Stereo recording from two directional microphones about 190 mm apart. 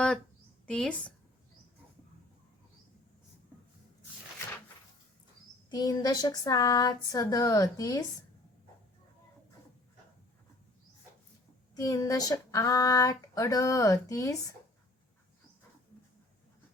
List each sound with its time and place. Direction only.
0.7 s speech: 5° left (ahead or behind)
5.7 s speech: 20° left (ahead or behind)
11.7 s speech: 20° left (ahead or behind)